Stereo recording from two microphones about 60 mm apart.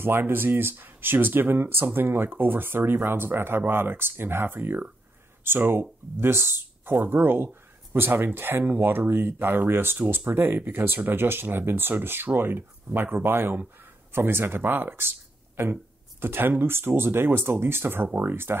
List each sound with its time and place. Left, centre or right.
0.0 s speech: right